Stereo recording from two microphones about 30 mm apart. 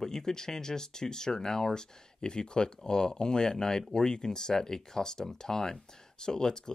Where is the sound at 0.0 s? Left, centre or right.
Centre.